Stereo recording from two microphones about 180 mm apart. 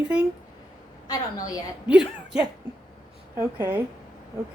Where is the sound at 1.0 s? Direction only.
20° left (ahead or behind).